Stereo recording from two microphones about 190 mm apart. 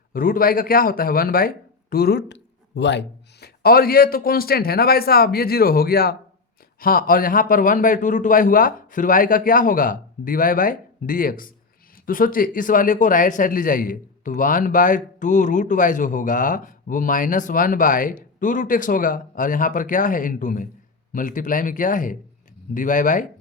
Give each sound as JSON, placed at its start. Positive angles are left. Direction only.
{"t": 0.1, "sound": "speech", "side_deg": 50}